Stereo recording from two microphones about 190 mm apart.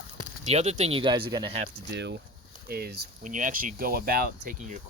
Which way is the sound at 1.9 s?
65° right (ahead or behind).